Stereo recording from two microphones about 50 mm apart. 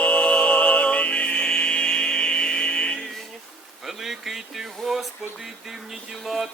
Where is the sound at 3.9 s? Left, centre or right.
Centre.